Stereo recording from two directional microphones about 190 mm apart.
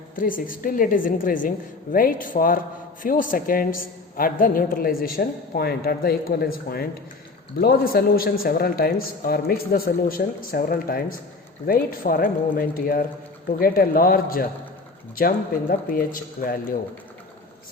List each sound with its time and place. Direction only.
0.2 s a woman's voice: 45° left (ahead or behind)
7.6 s a woman's voice: 50° left (ahead or behind)
15.9 s a woman's voice: 50° left (ahead or behind)